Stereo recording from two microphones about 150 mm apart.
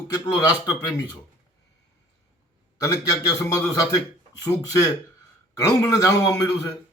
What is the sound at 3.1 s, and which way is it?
Speech, 25° left (ahead or behind).